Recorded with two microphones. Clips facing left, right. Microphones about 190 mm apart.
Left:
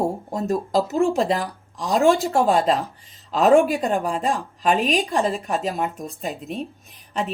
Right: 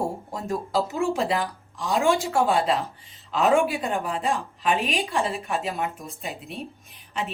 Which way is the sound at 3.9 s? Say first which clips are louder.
Left 4 dB; 40° left (ahead or behind).